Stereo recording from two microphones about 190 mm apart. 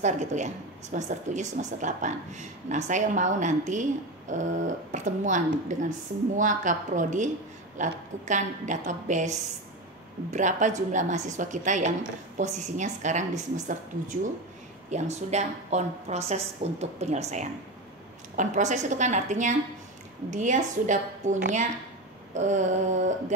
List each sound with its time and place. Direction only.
0.0 s speech: 40° right (ahead or behind)
10.3 s speech: 40° right (ahead or behind)